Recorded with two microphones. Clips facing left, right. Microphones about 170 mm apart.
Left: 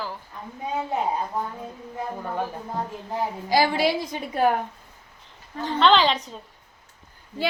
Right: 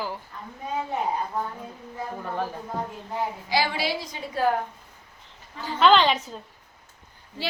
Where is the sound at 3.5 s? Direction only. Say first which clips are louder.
Left 6 dB; 45° left (ahead or behind).